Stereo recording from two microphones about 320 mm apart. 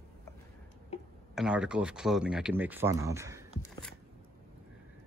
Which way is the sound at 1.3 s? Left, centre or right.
Centre.